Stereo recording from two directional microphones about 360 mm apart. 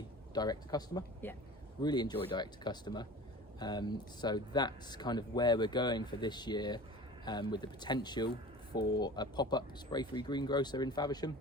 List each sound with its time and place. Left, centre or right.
0.3 s speech: centre